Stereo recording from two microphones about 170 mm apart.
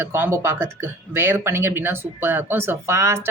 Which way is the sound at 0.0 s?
15° right (ahead or behind).